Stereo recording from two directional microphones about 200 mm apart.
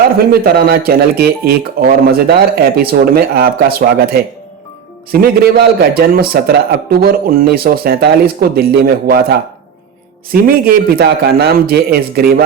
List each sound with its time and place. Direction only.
0.2 s speech: 50° right (ahead or behind)
10.3 s speech: 50° right (ahead or behind)